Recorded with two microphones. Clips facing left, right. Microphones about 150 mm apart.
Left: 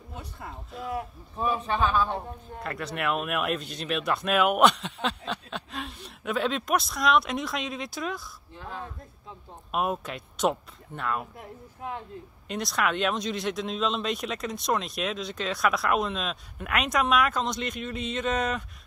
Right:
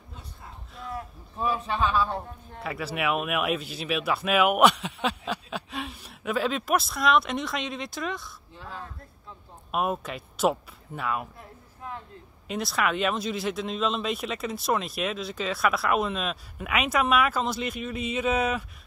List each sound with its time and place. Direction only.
0.1 s a sound: 65° left (ahead or behind)
1.3 s speech: centre (ahead or behind)
12.4 s speech: centre (ahead or behind)